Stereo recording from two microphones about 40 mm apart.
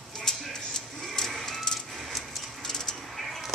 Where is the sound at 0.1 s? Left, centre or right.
Centre.